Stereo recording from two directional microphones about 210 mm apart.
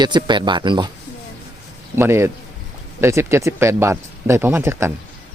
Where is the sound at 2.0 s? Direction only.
10° right (ahead or behind).